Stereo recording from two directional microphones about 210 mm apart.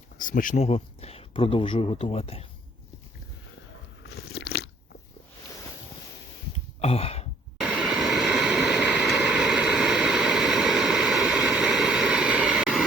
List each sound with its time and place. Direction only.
0.2 s speech: 40° left (ahead or behind)
4.1 s crunch: 50° left (ahead or behind)
6.8 s a sound: 30° left (ahead or behind)
7.6 s vehicle: 5° right (ahead or behind)